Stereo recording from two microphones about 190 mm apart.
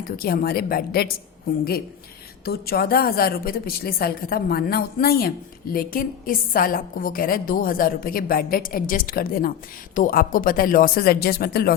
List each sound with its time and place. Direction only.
0.2 s a woman's voice: 50° left (ahead or behind)
2.4 s a woman's voice: 55° left (ahead or behind)